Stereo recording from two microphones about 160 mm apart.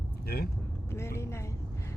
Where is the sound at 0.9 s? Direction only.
15° left (ahead or behind).